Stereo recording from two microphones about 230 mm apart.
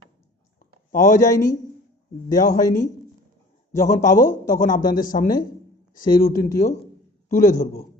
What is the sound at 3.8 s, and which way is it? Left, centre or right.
Speech, left.